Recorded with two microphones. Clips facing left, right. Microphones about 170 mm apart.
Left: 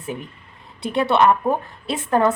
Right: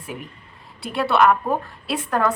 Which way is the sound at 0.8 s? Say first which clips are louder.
Left 1 dB; 20° left (ahead or behind).